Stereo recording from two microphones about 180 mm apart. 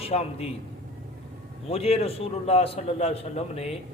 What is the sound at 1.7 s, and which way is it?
A man's voice, 35° left (ahead or behind).